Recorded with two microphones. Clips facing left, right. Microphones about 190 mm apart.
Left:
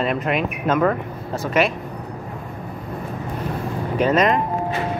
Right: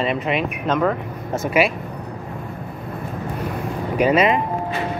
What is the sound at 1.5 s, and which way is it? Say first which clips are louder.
Speech: right 1 dB; 10° right (ahead or behind).